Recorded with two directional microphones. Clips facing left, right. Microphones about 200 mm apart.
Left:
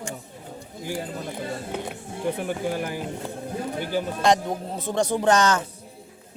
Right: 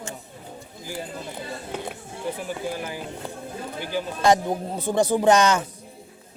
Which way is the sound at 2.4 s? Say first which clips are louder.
Left 3 dB; 55° left (ahead or behind).